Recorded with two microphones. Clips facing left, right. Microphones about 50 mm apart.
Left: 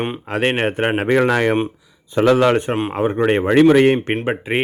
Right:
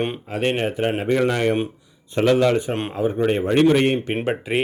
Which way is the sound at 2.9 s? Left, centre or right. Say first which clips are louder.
Left 3 dB; left.